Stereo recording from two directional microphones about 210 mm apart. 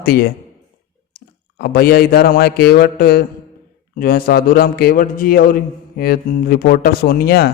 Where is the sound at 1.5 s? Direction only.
50° left (ahead or behind).